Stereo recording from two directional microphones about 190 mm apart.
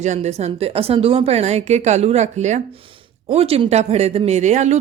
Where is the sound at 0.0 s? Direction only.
35° right (ahead or behind).